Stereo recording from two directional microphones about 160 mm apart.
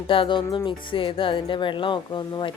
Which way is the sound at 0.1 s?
30° left (ahead or behind).